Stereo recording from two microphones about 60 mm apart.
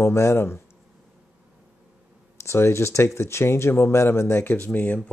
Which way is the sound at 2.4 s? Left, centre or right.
Left.